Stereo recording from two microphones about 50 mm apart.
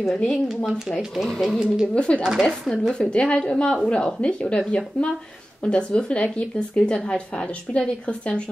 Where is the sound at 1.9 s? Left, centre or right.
Left.